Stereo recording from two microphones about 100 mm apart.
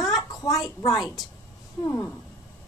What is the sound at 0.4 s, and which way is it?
Speech, 40° left (ahead or behind).